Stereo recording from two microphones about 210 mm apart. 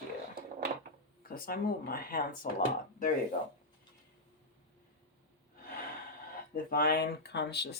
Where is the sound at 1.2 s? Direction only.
45° left (ahead or behind).